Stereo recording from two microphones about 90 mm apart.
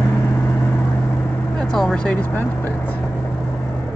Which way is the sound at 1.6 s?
5° left (ahead or behind).